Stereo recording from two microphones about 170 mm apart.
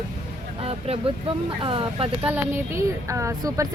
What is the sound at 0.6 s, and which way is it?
Speech, 35° right (ahead or behind).